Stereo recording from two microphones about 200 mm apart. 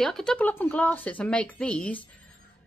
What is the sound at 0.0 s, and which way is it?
Speech, centre (ahead or behind).